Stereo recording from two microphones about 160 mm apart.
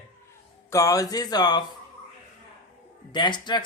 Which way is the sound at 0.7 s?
20° left (ahead or behind).